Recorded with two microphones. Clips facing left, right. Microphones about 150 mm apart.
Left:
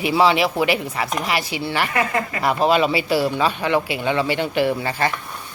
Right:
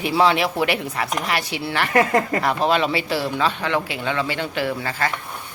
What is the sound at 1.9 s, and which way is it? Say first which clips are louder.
Speech: right 4 dB; 40° right (ahead or behind).